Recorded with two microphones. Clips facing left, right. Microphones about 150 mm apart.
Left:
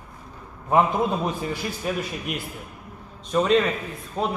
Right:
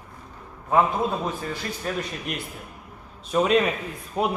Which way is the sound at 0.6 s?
15° left (ahead or behind).